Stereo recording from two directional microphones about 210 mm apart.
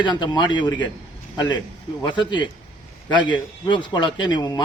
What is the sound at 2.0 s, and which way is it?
A man's voice, 20° left (ahead or behind).